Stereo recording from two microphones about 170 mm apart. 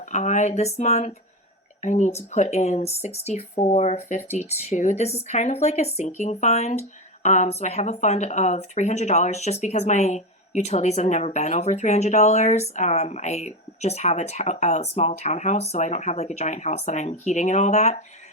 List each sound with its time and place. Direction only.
0.1 s speech: 45° left (ahead or behind)